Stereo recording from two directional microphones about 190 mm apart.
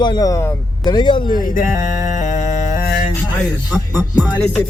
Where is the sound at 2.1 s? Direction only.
40° left (ahead or behind).